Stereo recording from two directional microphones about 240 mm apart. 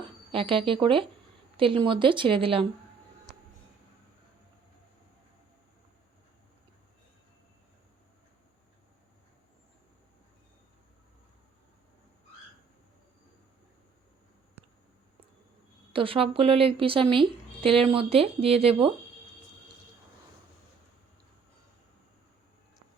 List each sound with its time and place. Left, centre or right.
0.3 s a woman's voice: right
15.9 s a woman's voice: right